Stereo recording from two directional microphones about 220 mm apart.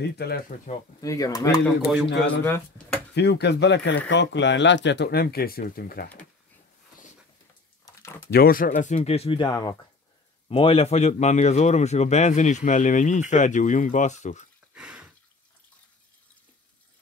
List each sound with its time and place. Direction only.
0.0 s speech: 45° left (ahead or behind)
1.0 s speech: 15° left (ahead or behind)
3.2 s speech: 50° left (ahead or behind)
7.8 s a sound: 10° left (ahead or behind)
8.3 s a man's voice: 45° left (ahead or behind)
14.7 s a sound: 5° right (ahead or behind)